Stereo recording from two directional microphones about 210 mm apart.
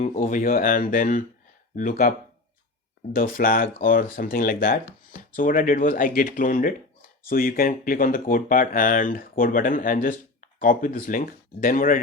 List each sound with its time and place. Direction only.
0.0 s speech: 35° left (ahead or behind)
3.2 s speech: 45° left (ahead or behind)